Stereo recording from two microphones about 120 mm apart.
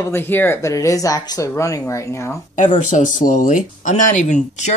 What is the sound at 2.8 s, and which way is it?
Speech, 90° left.